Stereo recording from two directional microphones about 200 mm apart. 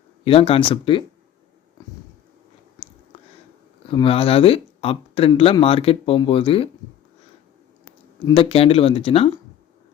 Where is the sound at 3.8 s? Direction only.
25° left (ahead or behind).